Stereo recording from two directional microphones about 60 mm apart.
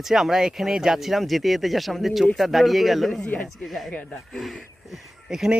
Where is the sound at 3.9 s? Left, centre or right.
Left.